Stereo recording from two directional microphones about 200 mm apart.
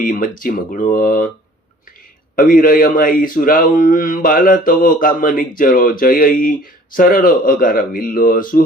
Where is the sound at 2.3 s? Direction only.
45° left (ahead or behind).